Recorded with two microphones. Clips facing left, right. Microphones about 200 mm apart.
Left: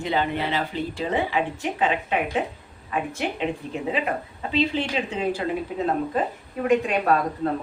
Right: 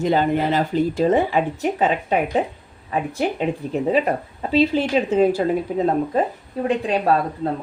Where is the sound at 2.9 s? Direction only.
35° right (ahead or behind).